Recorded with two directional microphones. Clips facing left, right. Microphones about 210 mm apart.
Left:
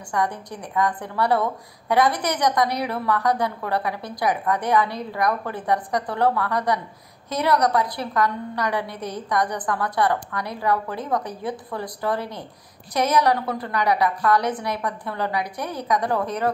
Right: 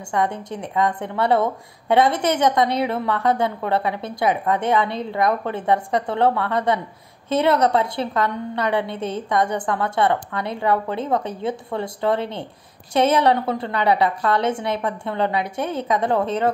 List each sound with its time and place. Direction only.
0.1 s a woman's voice: 25° right (ahead or behind)